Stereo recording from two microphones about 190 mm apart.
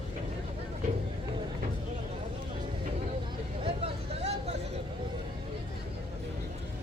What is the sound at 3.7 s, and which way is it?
Vehicle, 30° right (ahead or behind).